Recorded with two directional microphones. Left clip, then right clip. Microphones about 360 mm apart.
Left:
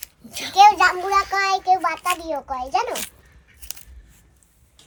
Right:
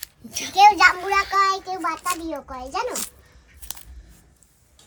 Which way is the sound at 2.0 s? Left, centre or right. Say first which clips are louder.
Left 4 dB; centre.